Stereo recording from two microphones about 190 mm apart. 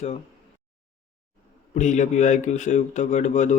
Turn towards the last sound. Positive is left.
turn(degrees=40)  # may be behind; listen again after turning